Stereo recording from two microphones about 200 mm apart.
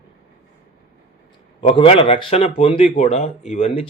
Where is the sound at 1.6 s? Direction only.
30° left (ahead or behind).